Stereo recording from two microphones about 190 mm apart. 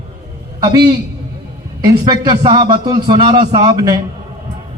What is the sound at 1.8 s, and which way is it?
A man's voice, 20° right (ahead or behind).